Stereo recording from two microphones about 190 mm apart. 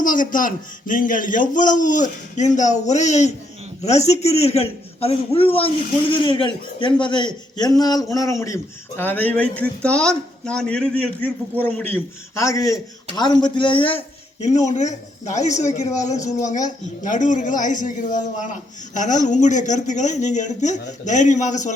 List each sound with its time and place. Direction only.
0.0 s a man's voice: 45° left (ahead or behind); by 14.0 s 25° left (ahead or behind)
14.4 s speech: 35° left (ahead or behind)